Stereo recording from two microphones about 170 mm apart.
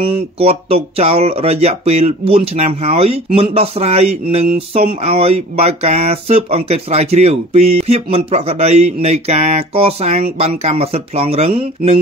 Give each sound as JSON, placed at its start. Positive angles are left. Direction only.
{"t": 0.0, "sound": "speech", "side_deg": -35}